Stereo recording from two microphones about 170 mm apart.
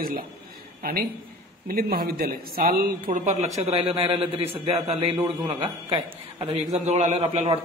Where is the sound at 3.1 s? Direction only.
45° right (ahead or behind); by 6.4 s 30° right (ahead or behind).